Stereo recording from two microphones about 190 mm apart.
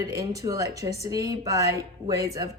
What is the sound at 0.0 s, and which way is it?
Speech, 20° right (ahead or behind).